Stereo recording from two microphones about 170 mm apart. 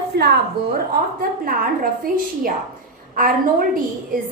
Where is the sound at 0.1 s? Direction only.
75° right (ahead or behind).